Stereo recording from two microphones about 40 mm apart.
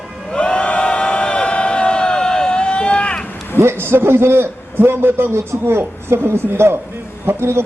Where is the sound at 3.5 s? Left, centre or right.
Right.